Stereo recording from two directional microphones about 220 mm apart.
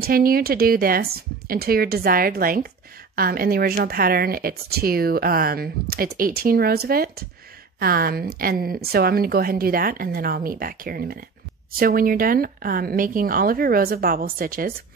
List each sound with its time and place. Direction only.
0.0 s a woman's voice: 40° right (ahead or behind)